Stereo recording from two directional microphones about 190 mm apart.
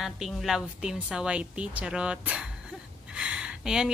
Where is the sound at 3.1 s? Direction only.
5° right (ahead or behind).